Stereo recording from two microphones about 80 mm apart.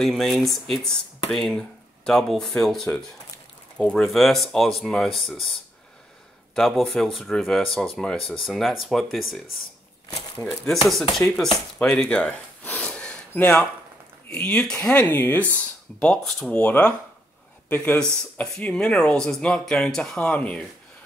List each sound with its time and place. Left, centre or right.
0.0 s speech: centre
10.6 s speech: centre
12.0 s gasp: centre
13.3 s speech: centre
15.0 s speech: left
15.5 s speech: centre
16.5 s speech: centre